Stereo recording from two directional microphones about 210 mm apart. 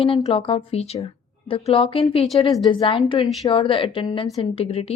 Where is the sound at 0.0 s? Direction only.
30° left (ahead or behind).